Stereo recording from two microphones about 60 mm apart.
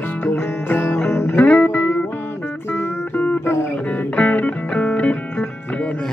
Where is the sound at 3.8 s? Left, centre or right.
Left.